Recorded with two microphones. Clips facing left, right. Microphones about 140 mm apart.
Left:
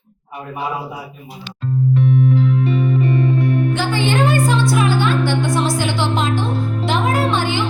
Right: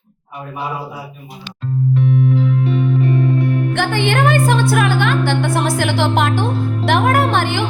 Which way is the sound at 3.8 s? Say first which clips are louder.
Right 1 dB; 60° right (ahead or behind).